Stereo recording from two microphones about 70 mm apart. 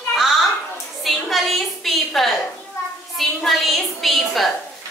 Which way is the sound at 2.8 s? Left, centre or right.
Left.